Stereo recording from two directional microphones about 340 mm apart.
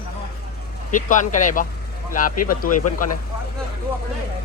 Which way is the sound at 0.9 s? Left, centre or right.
Left.